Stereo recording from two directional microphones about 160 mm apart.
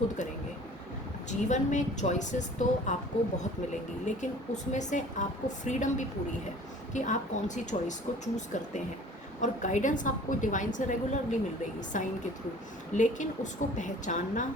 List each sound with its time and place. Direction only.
1.3 s a woman's voice: 50° left (ahead or behind)
4.0 s a woman's voice: 50° left (ahead or behind)